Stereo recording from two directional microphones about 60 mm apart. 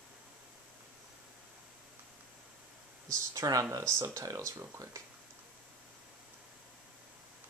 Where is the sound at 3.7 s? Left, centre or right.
Right.